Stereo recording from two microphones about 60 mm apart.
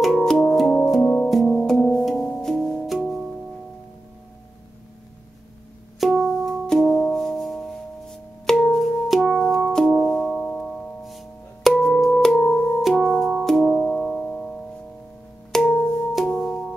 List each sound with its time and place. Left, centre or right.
0.0 s music: centre
1.0 s music: left
1.7 s music: centre
2.9 s music: centre
5.9 s music: centre
6.7 s music: centre
11.1 s music: centre
12.8 s music: centre